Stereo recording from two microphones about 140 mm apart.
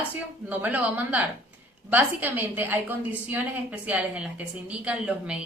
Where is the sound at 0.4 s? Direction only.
10° right (ahead or behind).